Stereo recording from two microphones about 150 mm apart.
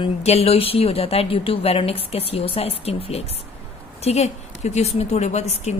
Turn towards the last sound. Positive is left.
turn(degrees=45)  # may be behind; listen again after turning